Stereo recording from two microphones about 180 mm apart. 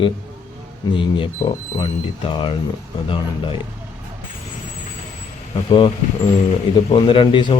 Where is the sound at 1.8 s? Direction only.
25° left (ahead or behind).